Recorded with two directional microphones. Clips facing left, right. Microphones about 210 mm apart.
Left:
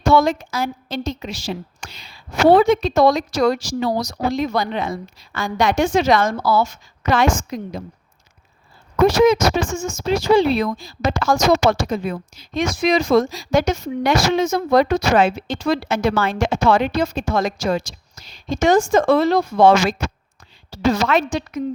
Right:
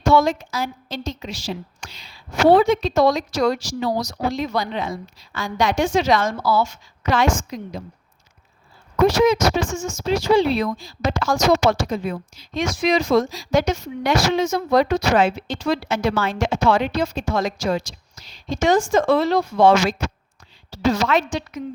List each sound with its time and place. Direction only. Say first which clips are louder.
0.1 s a woman's voice: left 1 dB; 55° left (ahead or behind)
9.0 s speech: left 2 dB; 50° left (ahead or behind)